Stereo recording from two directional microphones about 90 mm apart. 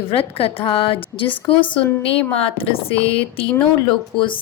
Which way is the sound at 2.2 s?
90° left.